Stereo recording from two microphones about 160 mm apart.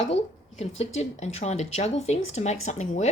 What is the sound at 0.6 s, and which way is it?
Speech, 45° left (ahead or behind).